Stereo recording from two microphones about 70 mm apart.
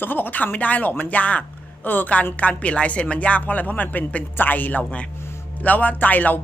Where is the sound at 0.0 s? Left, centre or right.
Left.